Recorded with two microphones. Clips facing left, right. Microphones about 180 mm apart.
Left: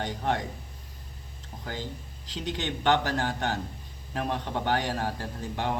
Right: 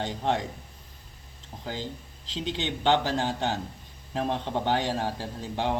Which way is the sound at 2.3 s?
20° right (ahead or behind).